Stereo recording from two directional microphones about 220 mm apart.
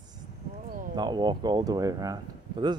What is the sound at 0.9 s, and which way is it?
Speech, 20° right (ahead or behind).